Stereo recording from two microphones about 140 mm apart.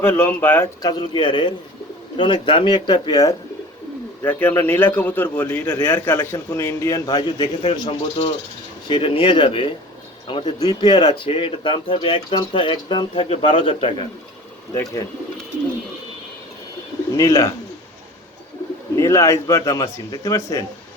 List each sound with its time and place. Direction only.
0.0 s a man's voice: 15° left (ahead or behind)
0.8 s speech: 30° left (ahead or behind)
4.2 s a man's voice: 15° left (ahead or behind); by 13.9 s 40° left (ahead or behind)
14.7 s a man's voice: 20° left (ahead or behind)
17.2 s a man's voice: 20° left (ahead or behind)
18.9 s a man's voice: 20° left (ahead or behind)